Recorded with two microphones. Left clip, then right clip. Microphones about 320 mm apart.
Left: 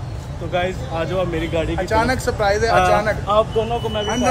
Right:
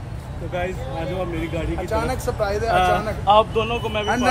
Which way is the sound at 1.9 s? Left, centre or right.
Left.